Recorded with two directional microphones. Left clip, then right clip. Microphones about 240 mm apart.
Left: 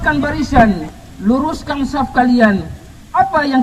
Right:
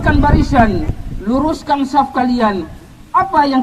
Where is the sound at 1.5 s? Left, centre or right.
Right.